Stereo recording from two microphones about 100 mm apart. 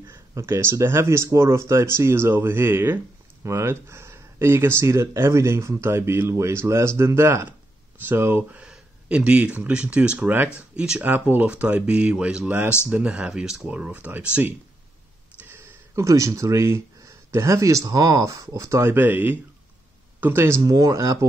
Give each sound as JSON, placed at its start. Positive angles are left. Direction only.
{"t": 0.1, "sound": "speech", "side_deg": -25}
{"t": 15.4, "sound": "speech", "side_deg": -25}
{"t": 20.6, "sound": "speech", "side_deg": -40}